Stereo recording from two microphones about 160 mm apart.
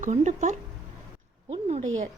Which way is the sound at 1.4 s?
45° right (ahead or behind).